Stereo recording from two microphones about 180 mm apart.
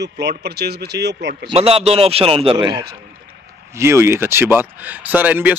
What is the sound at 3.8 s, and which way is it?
Speech, 15° right (ahead or behind).